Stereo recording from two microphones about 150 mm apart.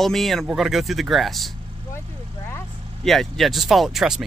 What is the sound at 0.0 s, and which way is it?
Speech, centre (ahead or behind).